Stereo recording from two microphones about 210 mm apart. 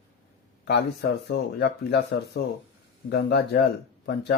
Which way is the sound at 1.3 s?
55° left (ahead or behind).